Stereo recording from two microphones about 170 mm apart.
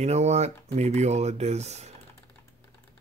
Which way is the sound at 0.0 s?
40° right (ahead or behind).